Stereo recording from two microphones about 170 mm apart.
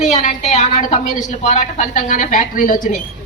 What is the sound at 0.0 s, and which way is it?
A woman's voice, 45° left (ahead or behind).